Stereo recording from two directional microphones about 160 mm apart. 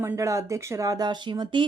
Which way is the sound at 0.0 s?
20° right (ahead or behind).